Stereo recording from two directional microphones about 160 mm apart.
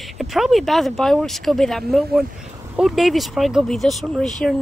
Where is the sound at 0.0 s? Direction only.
Centre (ahead or behind).